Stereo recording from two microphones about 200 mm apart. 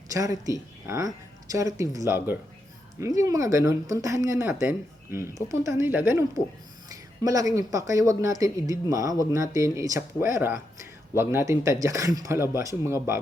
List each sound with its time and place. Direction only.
0.1 s speech: 15° right (ahead or behind)